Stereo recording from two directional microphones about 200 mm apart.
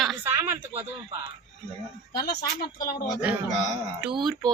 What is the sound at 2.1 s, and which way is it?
Speech, 55° left (ahead or behind).